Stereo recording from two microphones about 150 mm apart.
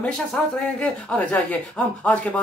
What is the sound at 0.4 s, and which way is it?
Speech, 5° left (ahead or behind).